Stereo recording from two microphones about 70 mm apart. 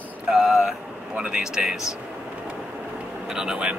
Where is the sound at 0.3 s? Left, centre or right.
Centre.